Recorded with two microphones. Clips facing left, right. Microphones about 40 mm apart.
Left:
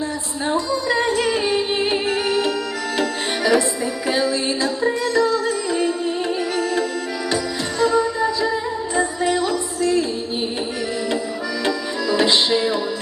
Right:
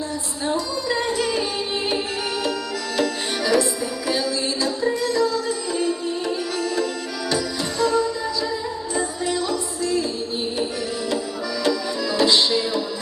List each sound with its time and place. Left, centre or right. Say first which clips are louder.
0.4 s music: left 3 dB; left
12.1 s music: left 1 dB; left